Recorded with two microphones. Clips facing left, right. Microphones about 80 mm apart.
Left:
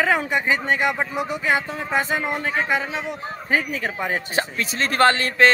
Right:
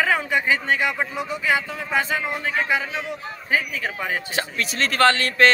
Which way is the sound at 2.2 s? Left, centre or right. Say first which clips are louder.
Left 2 dB; left.